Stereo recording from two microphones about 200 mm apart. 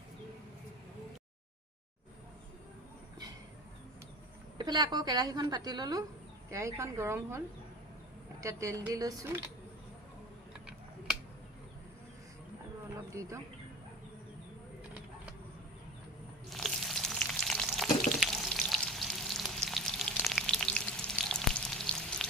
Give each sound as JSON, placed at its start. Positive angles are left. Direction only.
{"t": 4.5, "sound": "a woman's voice", "side_deg": -20}
{"t": 16.5, "sound": "frying", "side_deg": 0}